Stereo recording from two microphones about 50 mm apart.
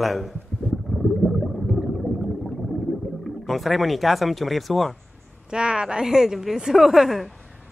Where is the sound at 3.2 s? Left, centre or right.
Centre.